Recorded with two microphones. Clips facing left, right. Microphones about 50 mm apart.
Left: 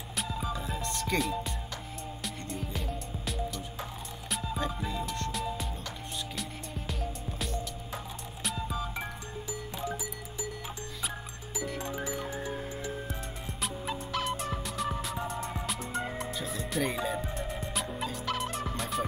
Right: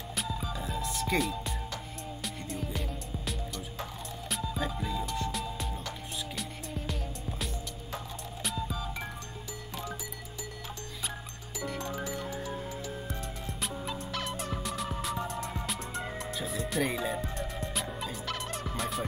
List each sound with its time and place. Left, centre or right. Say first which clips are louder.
0.5 s music: left 1 dB; centre
8.6 s music: left 2 dB; centre
11.8 s music: even; centre
12.3 s music: left 1 dB; left
13.1 s music: right 1 dB; centre
13.8 s fowl: left 6 dB; centre